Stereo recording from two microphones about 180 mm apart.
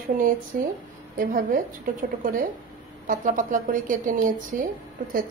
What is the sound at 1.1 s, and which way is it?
Speech, 50° right (ahead or behind).